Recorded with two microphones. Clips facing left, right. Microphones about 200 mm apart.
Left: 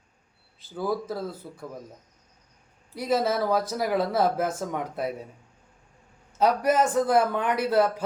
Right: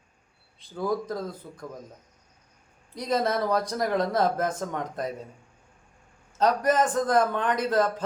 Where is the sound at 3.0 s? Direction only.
5° left (ahead or behind).